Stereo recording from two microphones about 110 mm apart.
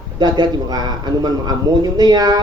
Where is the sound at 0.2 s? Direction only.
40° right (ahead or behind).